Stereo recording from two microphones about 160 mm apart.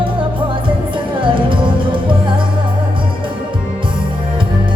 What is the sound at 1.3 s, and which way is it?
Music, 30° right (ahead or behind).